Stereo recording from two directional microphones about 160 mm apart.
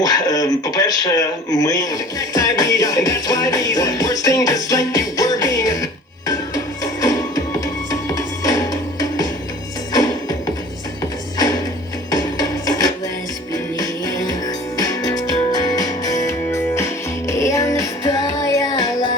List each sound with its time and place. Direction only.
0.0 s speech: 25° left (ahead or behind)
7.0 s music: 20° left (ahead or behind)
12.1 s music: 25° left (ahead or behind)